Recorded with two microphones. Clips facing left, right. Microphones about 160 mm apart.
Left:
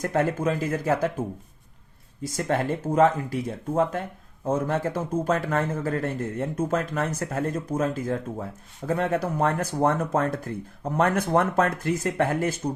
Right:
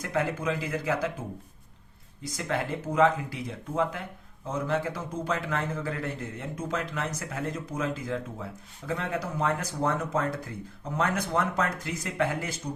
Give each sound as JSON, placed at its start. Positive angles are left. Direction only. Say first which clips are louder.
{"t": 0.0, "sound": "a man's voice", "louder": "left 5 dB", "side_deg": 45}
{"t": 2.2, "sound": "a man's voice", "louder": "left 5 dB", "side_deg": 45}